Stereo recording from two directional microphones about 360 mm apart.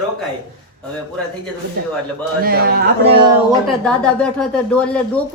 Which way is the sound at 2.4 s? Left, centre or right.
Right.